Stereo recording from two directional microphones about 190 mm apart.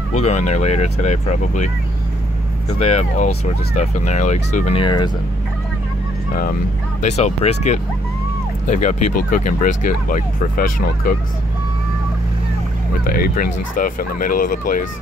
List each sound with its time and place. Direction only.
0.1 s speech: 35° left (ahead or behind)
2.8 s speech: 35° left (ahead or behind)
7.0 s speech: 35° left (ahead or behind)
12.9 s speech: 50° left (ahead or behind)